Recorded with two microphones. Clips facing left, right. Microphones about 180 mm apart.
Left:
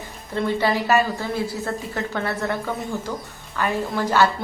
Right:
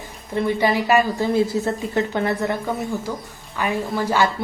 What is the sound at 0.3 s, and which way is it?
A woman's voice, 15° right (ahead or behind).